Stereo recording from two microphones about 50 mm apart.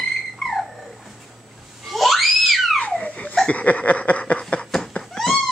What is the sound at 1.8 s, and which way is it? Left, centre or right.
Screaming, centre.